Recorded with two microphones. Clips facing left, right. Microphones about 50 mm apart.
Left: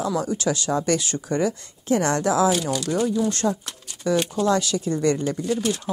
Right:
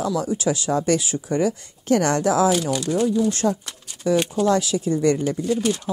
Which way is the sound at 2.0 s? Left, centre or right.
Right.